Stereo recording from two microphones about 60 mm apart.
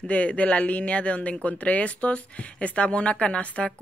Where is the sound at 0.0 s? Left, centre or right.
Left.